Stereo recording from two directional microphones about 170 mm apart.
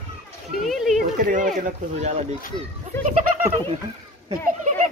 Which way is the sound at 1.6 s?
40° right (ahead or behind).